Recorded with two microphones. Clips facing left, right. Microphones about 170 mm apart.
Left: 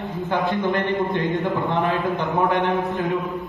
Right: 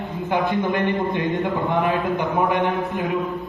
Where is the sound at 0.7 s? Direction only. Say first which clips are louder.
Even; 20° right (ahead or behind).